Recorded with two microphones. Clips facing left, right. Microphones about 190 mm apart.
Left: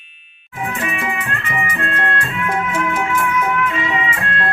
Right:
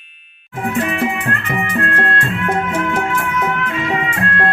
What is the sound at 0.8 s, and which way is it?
Music, 55° right (ahead or behind).